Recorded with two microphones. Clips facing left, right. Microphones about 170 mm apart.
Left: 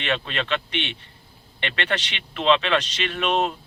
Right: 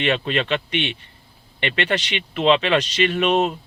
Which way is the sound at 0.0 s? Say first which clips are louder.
Right 5 dB; 15° right (ahead or behind).